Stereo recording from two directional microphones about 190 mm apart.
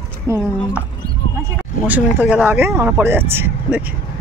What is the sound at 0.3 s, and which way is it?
Speech, 15° right (ahead or behind).